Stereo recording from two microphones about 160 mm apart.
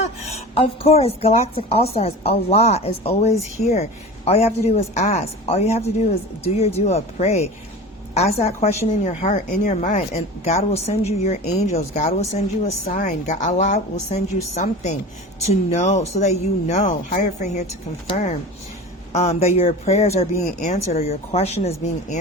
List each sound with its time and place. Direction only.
0.0 s a woman's voice: 45° left (ahead or behind)